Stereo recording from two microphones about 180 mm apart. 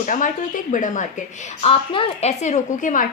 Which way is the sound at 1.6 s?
30° left (ahead or behind).